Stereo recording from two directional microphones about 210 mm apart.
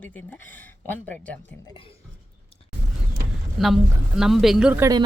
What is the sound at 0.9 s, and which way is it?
Speech, 5° left (ahead or behind).